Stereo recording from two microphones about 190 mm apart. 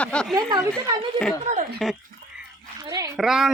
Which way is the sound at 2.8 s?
20° right (ahead or behind).